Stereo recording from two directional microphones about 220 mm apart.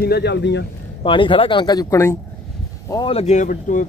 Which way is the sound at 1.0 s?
25° left (ahead or behind).